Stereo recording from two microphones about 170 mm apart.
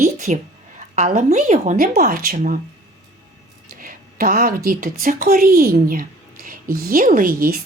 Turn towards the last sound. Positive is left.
turn(degrees=-55)  # may be behind; listen again after turning